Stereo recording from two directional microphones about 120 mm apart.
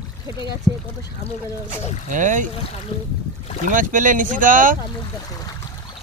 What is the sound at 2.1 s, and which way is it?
Speech, 90° right.